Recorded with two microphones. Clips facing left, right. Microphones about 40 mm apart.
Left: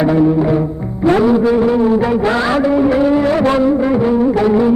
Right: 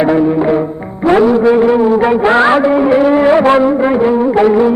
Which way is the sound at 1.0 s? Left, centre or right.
Centre.